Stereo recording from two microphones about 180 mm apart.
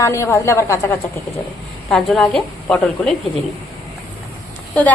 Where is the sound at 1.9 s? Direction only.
5° left (ahead or behind).